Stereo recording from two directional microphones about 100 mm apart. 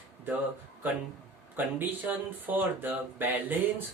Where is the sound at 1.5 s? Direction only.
20° right (ahead or behind).